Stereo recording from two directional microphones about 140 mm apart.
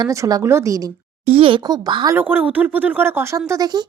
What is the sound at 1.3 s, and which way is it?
Speech, 40° right (ahead or behind).